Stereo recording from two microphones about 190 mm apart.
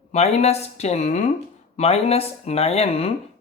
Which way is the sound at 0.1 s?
35° left (ahead or behind).